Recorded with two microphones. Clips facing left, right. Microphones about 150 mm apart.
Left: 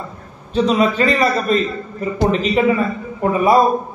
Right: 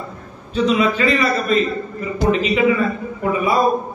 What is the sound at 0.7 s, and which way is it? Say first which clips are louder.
Speech: left 1 dB; 40° left (ahead or behind).